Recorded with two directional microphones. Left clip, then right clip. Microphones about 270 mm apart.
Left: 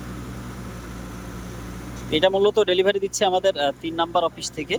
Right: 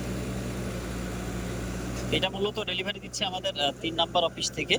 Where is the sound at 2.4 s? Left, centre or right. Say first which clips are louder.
Left 12 dB; centre.